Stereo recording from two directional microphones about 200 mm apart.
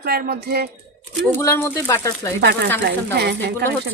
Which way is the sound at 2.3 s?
50° right (ahead or behind).